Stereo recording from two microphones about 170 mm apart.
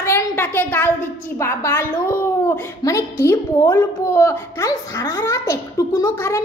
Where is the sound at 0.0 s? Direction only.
15° left (ahead or behind).